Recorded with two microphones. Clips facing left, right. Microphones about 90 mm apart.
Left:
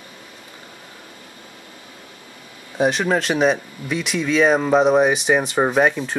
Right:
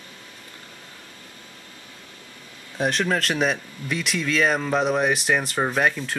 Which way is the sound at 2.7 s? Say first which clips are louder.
Left 5 dB; 5° left (ahead or behind).